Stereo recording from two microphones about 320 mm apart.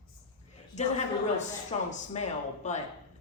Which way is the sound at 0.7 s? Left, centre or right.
Left.